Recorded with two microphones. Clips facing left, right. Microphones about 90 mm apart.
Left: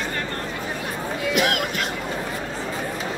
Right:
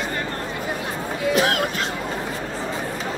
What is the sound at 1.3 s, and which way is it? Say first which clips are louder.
Music: right 1 dB; 35° right (ahead or behind).